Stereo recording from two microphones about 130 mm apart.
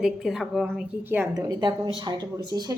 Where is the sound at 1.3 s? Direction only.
35° right (ahead or behind).